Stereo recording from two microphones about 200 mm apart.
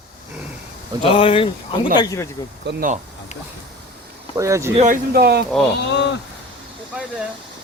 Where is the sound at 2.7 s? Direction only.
45° right (ahead or behind).